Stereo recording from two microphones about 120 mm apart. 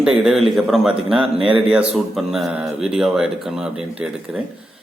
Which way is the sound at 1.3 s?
50° right (ahead or behind).